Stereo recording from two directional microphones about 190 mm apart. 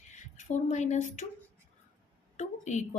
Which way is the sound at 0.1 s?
40° left (ahead or behind).